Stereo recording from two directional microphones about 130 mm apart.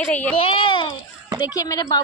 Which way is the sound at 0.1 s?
10° left (ahead or behind).